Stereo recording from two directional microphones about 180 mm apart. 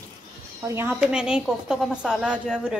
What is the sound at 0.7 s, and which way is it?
A woman's voice, 10° right (ahead or behind).